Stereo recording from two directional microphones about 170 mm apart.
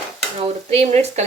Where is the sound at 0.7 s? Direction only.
40° right (ahead or behind).